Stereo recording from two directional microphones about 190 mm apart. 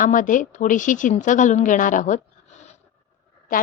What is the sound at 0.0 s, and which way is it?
A woman's voice, 45° left (ahead or behind).